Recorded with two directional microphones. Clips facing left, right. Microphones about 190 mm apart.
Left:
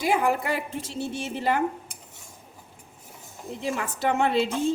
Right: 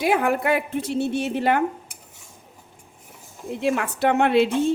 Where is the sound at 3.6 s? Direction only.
65° right (ahead or behind).